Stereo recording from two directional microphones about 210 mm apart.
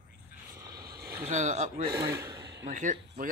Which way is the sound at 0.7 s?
50° right (ahead or behind).